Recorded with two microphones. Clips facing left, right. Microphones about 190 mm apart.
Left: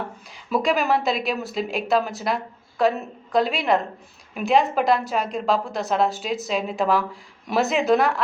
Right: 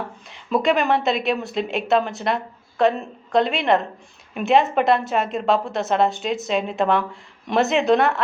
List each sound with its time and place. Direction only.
0.3 s a woman's voice: centre (ahead or behind)